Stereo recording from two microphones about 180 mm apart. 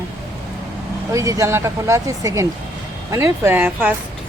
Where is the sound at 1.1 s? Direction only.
15° right (ahead or behind).